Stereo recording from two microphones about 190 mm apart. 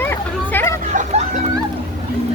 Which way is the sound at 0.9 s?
40° right (ahead or behind).